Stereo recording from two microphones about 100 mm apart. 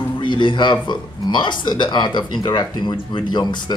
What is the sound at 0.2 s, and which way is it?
Speech, 55° left (ahead or behind).